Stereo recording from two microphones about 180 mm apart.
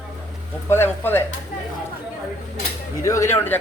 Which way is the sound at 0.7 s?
10° left (ahead or behind).